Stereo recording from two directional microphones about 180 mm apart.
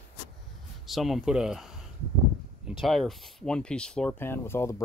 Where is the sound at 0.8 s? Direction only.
Centre (ahead or behind).